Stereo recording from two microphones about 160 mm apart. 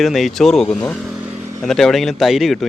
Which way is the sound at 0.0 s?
Centre (ahead or behind).